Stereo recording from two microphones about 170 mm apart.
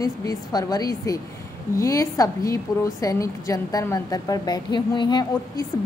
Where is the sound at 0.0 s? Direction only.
20° left (ahead or behind).